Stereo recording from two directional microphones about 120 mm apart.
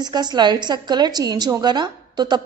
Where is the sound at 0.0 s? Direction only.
35° right (ahead or behind).